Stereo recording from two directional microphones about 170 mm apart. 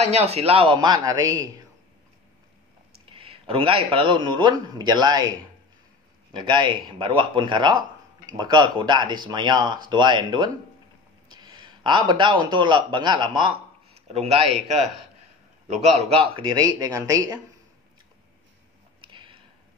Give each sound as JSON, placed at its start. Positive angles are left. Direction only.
{"t": 0.0, "sound": "speech", "side_deg": -40}
{"t": 3.1, "sound": "a man's voice", "side_deg": -35}
{"t": 6.3, "sound": "speech", "side_deg": -25}
{"t": 11.3, "sound": "a sound", "side_deg": -25}
{"t": 12.1, "sound": "speech", "side_deg": -30}
{"t": 15.7, "sound": "speech", "side_deg": -35}
{"t": 18.9, "sound": "a sound", "side_deg": -30}